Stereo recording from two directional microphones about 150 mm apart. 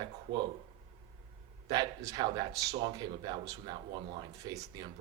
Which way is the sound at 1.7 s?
30° right (ahead or behind).